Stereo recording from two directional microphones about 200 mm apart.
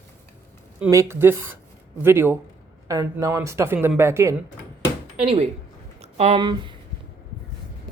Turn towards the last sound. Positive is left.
turn(degrees=-25)  # may be behind; listen again after turning